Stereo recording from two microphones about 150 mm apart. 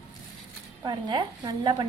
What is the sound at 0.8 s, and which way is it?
A woman's voice, 30° right (ahead or behind).